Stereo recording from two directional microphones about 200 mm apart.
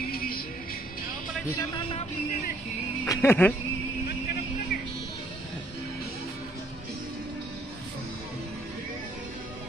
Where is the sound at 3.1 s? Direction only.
10° left (ahead or behind).